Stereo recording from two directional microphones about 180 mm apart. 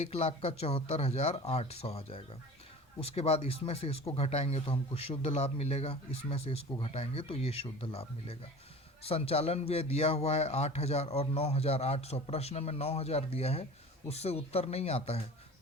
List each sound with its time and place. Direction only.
0.0 s speech: 35° left (ahead or behind)